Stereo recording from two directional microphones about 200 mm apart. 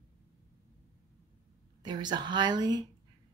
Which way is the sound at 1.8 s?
20° right (ahead or behind).